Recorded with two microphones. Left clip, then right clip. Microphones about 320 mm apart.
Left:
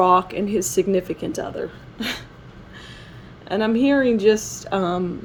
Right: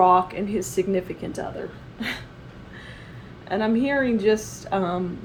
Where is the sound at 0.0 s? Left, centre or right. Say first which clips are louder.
Left 1 dB; left.